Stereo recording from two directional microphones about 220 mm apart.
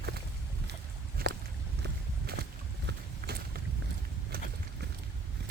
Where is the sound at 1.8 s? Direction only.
50° right (ahead or behind).